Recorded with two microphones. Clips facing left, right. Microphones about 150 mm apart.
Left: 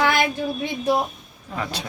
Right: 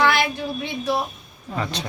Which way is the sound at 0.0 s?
50° left (ahead or behind).